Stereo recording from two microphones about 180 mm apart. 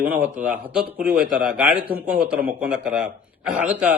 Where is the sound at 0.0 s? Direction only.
10° right (ahead or behind).